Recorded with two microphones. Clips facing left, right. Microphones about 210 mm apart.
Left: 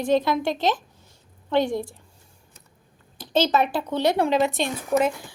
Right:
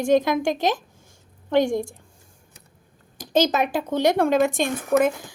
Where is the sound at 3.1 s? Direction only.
45° right (ahead or behind).